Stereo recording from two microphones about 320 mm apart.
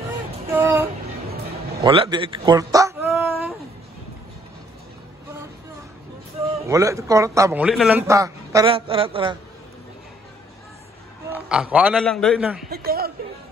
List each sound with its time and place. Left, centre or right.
0.5 s music: centre
1.8 s a man's voice: centre
3.1 s a sound: centre
6.7 s a man's voice: centre
11.2 s a man's voice: centre
12.6 s a sound: right